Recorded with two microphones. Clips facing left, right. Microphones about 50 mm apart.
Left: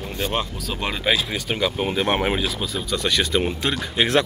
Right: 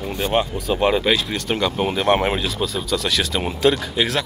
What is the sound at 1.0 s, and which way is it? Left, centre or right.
Speech, centre.